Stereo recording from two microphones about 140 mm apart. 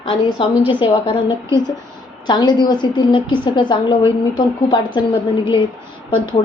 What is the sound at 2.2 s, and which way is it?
A woman's voice, 30° left (ahead or behind).